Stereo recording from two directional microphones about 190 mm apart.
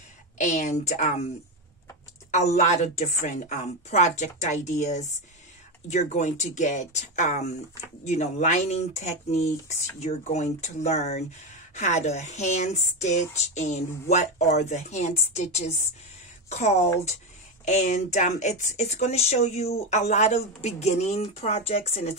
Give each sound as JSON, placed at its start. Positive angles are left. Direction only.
{"t": 0.4, "sound": "speech", "side_deg": 40}
{"t": 2.3, "sound": "speech", "side_deg": 40}